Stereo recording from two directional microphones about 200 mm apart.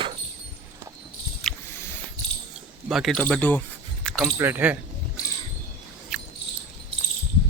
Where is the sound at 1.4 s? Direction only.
Centre (ahead or behind).